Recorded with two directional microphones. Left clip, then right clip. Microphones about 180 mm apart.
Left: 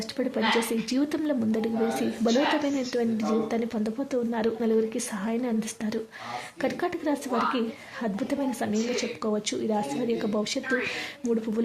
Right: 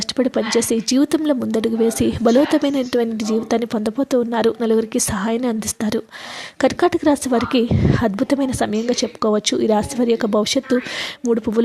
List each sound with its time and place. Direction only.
0.2 s a woman's voice: 40° right (ahead or behind)